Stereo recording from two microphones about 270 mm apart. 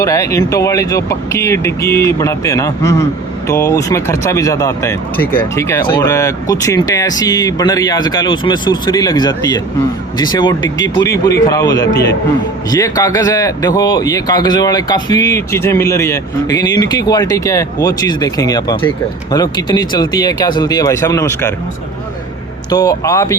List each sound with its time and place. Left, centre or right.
0.0 s speech: centre
22.7 s speech: centre